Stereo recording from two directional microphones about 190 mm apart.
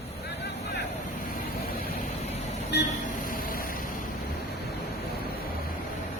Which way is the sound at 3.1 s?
45° left (ahead or behind).